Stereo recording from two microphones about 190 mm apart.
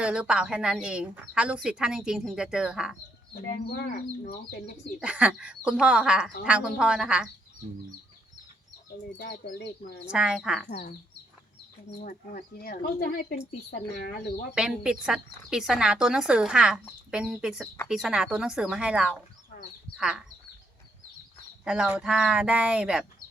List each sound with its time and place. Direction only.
0.0 s speech: 5° right (ahead or behind)
3.7 s speech: 50° left (ahead or behind)
4.9 s speech: 5° right (ahead or behind)
9.2 s speech: 55° left (ahead or behind)
10.1 s speech: 5° right (ahead or behind)
10.7 s speech: 50° left (ahead or behind)
12.0 s speech: 50° left (ahead or behind)
14.5 s speech: 5° right (ahead or behind)
21.6 s speech: 5° right (ahead or behind)